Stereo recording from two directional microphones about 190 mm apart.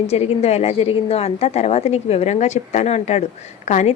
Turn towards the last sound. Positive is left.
turn(degrees=40)  # may be behind; listen again after turning